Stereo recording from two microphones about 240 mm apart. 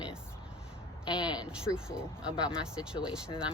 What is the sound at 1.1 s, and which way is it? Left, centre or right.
Speech, centre.